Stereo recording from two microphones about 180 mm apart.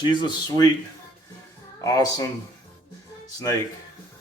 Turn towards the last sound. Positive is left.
turn(degrees=20)  # may be behind; listen again after turning